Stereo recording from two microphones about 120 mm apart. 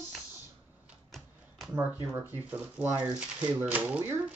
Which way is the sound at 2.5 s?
10° right (ahead or behind).